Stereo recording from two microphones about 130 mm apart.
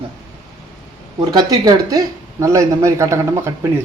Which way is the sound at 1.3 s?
30° right (ahead or behind).